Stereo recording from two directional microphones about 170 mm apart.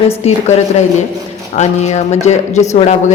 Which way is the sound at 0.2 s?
40° left (ahead or behind).